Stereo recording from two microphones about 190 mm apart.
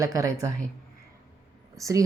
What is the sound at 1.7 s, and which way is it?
Speech, 15° right (ahead or behind).